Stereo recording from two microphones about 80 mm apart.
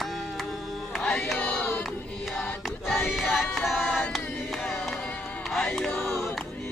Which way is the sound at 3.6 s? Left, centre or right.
Centre.